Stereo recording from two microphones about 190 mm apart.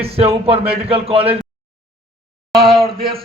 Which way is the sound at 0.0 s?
30° right (ahead or behind).